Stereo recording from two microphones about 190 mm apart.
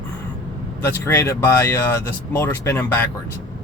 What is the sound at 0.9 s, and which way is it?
Speech, 10° left (ahead or behind).